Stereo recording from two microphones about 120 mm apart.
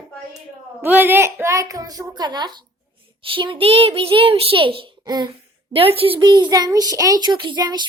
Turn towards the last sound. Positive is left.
turn(degrees=-35)  # may be behind; listen again after turning